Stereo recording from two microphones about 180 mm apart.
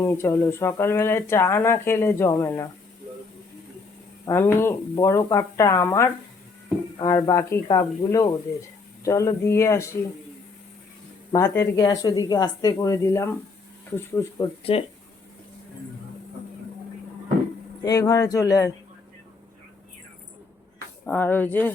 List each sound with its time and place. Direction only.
0.0 s speech: 15° left (ahead or behind)
4.3 s speech: 15° left (ahead or behind)
11.3 s speech: 20° left (ahead or behind)
14.6 s speech: 30° left (ahead or behind)
17.8 s speech: 20° left (ahead or behind)
21.1 s speech: 10° left (ahead or behind)